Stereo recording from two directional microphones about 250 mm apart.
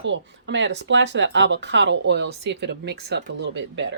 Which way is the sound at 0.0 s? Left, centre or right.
Right.